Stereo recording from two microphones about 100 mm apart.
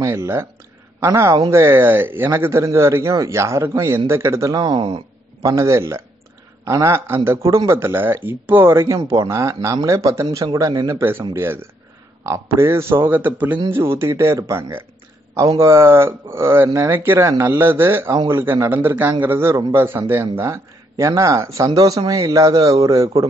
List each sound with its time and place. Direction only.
0.0 s speech: 30° right (ahead or behind)
4.6 s speech: 50° right (ahead or behind)
5.4 s a man's voice: 35° right (ahead or behind)
11.0 s a man's voice: 25° right (ahead or behind)